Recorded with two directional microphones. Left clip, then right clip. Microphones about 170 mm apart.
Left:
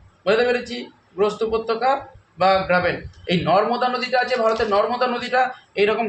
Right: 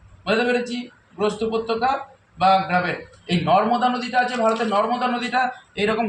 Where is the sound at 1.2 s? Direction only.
60° left (ahead or behind).